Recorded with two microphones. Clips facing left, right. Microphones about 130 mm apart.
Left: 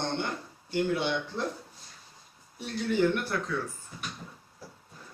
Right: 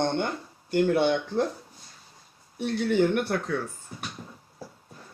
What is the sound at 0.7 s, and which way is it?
Speech, 55° right (ahead or behind).